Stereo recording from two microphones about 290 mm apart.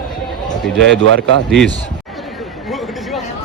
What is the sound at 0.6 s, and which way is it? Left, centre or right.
Speech, centre.